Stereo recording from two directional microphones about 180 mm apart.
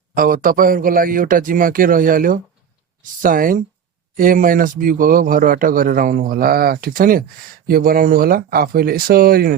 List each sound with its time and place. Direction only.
0.1 s a man's voice: 55° right (ahead or behind)